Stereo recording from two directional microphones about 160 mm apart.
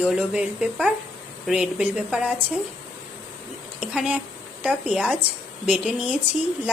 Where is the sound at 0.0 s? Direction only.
10° right (ahead or behind).